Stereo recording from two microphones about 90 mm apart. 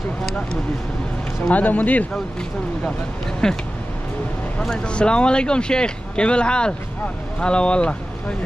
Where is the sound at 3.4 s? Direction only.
5° left (ahead or behind).